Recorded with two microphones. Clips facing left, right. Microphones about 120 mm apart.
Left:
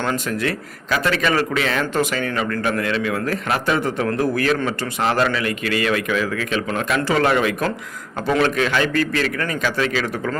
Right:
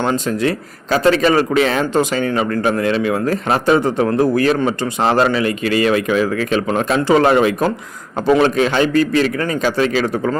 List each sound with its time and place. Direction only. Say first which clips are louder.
0.0 s a man's voice: right 5 dB; 25° right (ahead or behind)